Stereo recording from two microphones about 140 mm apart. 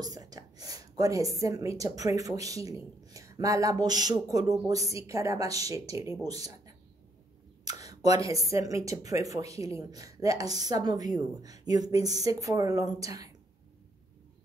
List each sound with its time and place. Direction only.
0.0 s a woman's voice: 25° right (ahead or behind)